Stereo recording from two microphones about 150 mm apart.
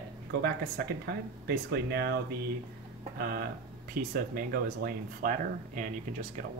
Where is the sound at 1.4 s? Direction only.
90° right.